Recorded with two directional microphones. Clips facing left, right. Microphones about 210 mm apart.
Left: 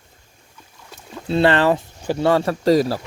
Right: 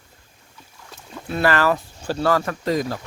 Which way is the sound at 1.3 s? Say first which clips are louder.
Left 4 dB; 25° left (ahead or behind).